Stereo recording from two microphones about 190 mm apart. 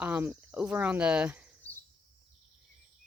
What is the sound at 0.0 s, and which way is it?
Cricket, 10° right (ahead or behind).